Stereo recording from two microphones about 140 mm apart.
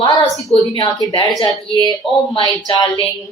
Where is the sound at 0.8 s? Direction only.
35° left (ahead or behind).